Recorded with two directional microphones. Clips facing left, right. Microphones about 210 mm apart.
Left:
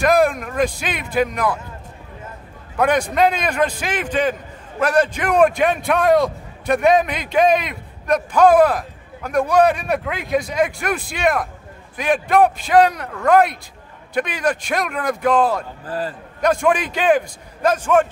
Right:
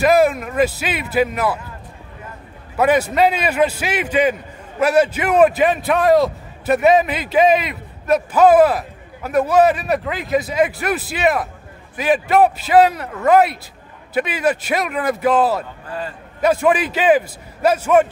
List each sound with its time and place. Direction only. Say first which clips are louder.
0.0 s a man's voice: right 2 dB; 5° right (ahead or behind)
2.8 s a man's voice: right 2 dB; 5° right (ahead or behind)
15.9 s a man's voice: left 3 dB; 35° left (ahead or behind)
16.3 s a man's voice: right 2 dB; 5° right (ahead or behind)